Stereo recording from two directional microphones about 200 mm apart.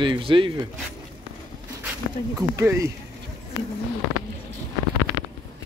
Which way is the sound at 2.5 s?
15° right (ahead or behind).